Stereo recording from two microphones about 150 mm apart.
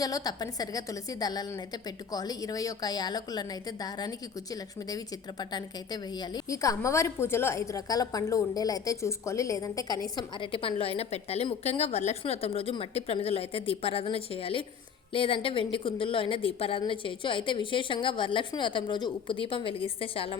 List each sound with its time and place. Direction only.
0.0 s a woman's voice: 25° left (ahead or behind)